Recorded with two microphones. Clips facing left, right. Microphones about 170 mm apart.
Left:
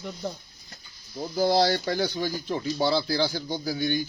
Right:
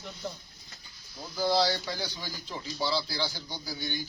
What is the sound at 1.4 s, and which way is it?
Speech, 50° left (ahead or behind).